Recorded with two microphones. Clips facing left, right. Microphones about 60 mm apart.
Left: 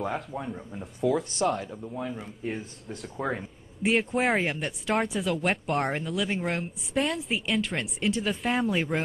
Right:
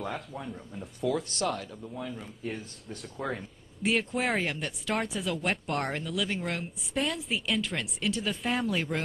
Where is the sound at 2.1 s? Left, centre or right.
Centre.